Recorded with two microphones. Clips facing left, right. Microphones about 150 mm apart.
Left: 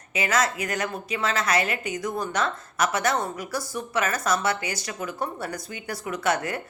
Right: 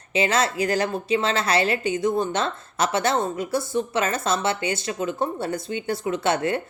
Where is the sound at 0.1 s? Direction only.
30° right (ahead or behind).